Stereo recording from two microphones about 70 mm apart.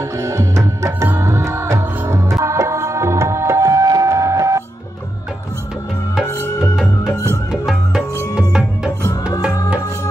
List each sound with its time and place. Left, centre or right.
0.2 s music: right
4.1 s a sound: right
8.4 s music: centre